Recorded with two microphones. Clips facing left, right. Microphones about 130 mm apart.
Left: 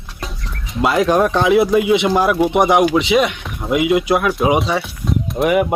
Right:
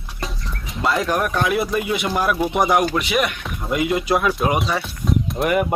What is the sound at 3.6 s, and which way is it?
Music, 10° left (ahead or behind).